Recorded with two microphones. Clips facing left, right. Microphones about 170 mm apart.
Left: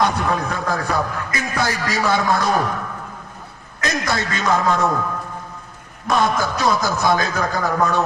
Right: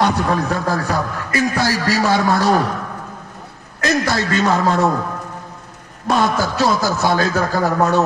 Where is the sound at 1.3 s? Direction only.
30° right (ahead or behind).